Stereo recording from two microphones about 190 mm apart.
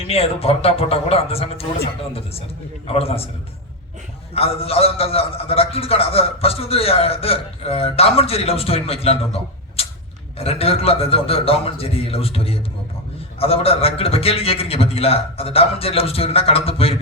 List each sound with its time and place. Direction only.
0.1 s a man's voice: 30° left (ahead or behind)
2.8 s a man's voice: 30° left (ahead or behind)
4.4 s a man's voice: 30° left (ahead or behind)